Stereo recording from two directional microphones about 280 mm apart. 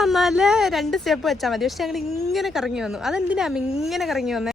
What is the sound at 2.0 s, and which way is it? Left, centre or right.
Speech, left.